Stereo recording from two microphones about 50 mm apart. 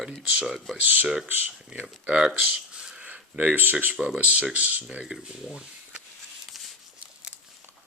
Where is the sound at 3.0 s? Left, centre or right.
Right.